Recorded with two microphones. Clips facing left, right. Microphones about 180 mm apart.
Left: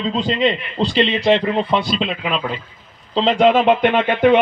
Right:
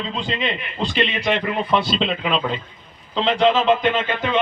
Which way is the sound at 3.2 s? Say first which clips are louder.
Left 4 dB; 45° left (ahead or behind).